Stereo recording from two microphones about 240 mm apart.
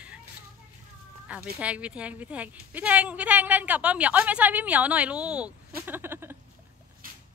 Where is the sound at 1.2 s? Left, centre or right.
Centre.